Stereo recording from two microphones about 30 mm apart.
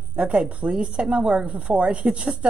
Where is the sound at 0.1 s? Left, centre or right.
Right.